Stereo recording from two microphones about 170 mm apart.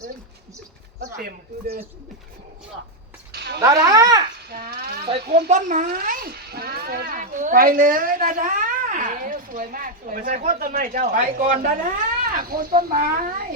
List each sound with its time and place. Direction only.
0.9 s a child's voice: 65° right (ahead or behind)
3.3 s a sound: 75° right (ahead or behind)
3.6 s speech: 20° right (ahead or behind)
4.4 s a child's voice: 70° right (ahead or behind)
5.5 s a child's voice: 45° right (ahead or behind)